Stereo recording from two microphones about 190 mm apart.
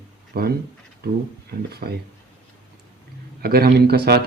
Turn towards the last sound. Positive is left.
turn(degrees=-55)  # may be behind; listen again after turning